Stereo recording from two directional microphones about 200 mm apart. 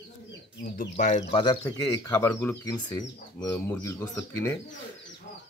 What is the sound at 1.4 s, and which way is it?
Speech, 20° left (ahead or behind).